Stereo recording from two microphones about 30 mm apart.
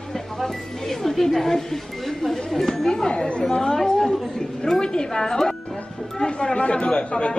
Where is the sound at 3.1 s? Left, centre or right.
Left.